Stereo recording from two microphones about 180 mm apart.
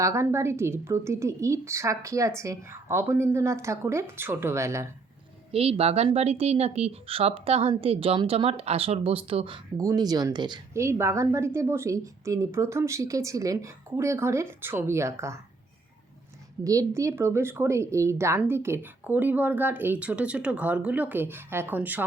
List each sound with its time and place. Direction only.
0.0 s speech: 15° right (ahead or behind)
5.5 s speech: 30° right (ahead or behind)
9.7 s speech: 20° right (ahead or behind)
16.6 s speech: 15° right (ahead or behind)